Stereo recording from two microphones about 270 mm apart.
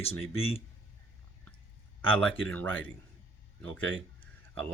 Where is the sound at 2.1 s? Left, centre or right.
Centre.